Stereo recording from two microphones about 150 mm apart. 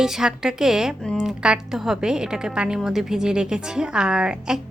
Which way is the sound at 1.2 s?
5° right (ahead or behind).